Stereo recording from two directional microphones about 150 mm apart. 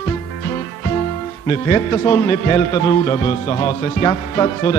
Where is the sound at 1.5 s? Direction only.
20° left (ahead or behind).